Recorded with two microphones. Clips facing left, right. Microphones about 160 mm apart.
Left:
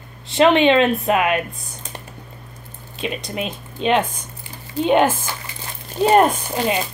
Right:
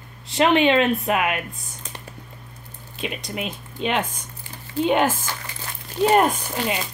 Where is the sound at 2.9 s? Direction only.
25° left (ahead or behind).